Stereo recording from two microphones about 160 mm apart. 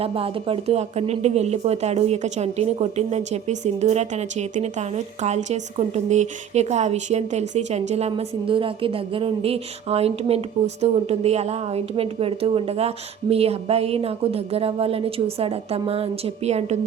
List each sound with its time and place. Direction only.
0.0 s a woman's voice: 35° right (ahead or behind)